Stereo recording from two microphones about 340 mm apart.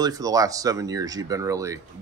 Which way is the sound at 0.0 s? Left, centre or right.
Centre.